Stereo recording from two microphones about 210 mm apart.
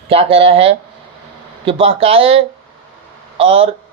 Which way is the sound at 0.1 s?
25° right (ahead or behind).